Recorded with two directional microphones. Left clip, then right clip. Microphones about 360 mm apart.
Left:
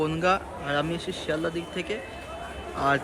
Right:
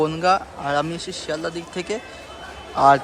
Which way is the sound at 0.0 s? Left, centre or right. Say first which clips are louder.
Right 6 dB; centre.